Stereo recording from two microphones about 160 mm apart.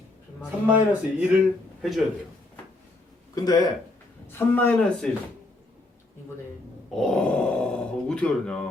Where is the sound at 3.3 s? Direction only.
25° left (ahead or behind).